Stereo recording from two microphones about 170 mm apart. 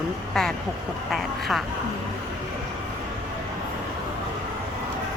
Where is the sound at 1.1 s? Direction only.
Centre (ahead or behind).